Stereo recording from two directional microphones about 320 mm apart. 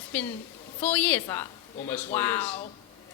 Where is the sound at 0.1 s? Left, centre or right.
Centre.